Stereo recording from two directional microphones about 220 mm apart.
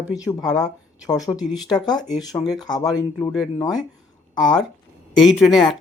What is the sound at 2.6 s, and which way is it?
Speech, 20° left (ahead or behind).